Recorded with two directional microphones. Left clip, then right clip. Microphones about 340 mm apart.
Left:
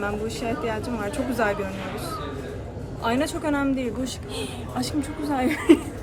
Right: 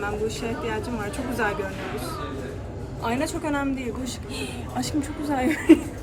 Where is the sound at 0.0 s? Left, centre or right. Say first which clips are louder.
Even; centre.